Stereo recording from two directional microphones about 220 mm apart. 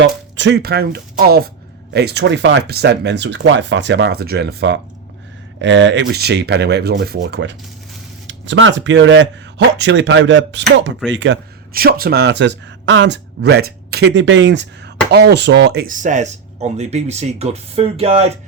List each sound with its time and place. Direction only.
0.0 s speech: 55° right (ahead or behind); by 18.3 s 25° right (ahead or behind)